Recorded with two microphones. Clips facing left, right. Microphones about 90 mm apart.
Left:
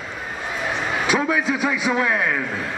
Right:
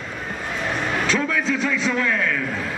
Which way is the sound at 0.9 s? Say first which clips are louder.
Left 2 dB; 5° left (ahead or behind).